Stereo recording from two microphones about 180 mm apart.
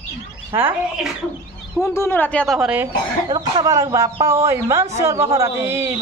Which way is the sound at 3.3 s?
20° right (ahead or behind).